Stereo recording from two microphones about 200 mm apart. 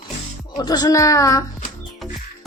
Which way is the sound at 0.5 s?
20° left (ahead or behind).